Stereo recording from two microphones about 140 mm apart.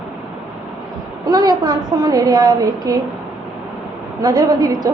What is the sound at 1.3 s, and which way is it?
A woman's voice, 30° right (ahead or behind).